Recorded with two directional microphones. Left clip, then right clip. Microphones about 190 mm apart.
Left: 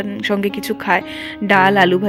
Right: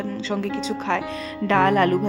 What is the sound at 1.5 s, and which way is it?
Speech, 20° left (ahead or behind).